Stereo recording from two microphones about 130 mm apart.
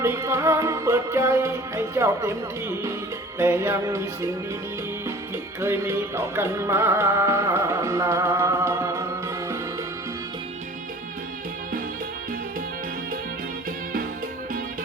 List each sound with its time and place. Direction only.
0.0 s music: 20° right (ahead or behind)
5.5 s music: 20° right (ahead or behind)